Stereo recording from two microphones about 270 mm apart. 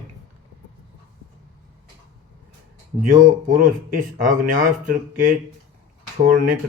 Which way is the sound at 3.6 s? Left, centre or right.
Right.